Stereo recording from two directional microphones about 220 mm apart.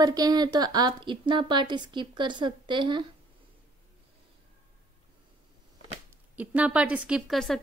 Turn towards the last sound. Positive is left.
turn(degrees=0)  # may be behind; listen again after turning